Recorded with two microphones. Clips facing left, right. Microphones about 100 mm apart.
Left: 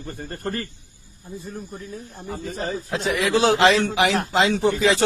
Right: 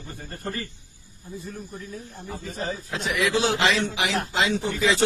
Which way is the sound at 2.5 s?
55° left (ahead or behind).